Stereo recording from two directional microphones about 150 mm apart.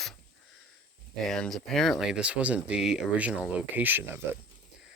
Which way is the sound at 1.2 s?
Centre (ahead or behind).